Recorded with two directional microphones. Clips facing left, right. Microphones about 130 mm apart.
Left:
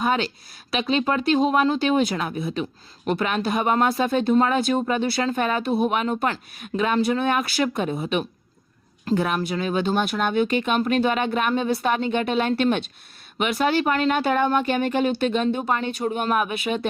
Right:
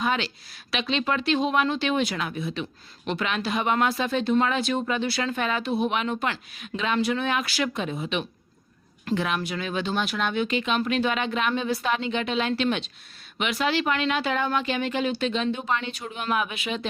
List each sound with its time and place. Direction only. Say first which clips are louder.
0.0 s speech: left 4 dB; 40° left (ahead or behind)
2.4 s speech: left 4 dB; 45° left (ahead or behind)
7.9 s speech: left 4 dB; 30° left (ahead or behind)
9.0 s speech: left 4 dB; 40° left (ahead or behind)